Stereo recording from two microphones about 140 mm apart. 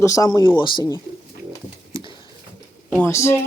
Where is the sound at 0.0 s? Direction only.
25° left (ahead or behind).